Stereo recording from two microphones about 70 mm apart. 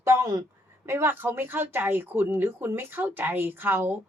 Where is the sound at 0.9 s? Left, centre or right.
Right.